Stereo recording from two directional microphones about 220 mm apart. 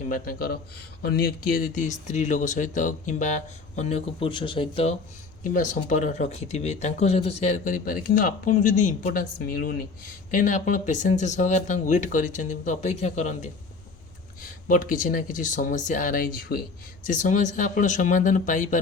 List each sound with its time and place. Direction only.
0.1 s speech: 40° left (ahead or behind); by 4.9 s 25° left (ahead or behind)
5.4 s speech: 35° left (ahead or behind)